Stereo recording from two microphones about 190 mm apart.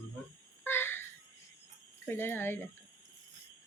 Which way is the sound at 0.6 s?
10° left (ahead or behind).